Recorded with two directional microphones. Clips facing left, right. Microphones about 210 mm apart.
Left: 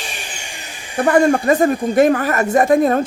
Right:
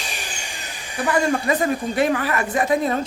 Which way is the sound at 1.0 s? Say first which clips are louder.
Left 7 dB; 50° left (ahead or behind).